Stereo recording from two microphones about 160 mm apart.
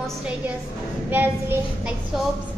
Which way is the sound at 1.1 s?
10° right (ahead or behind).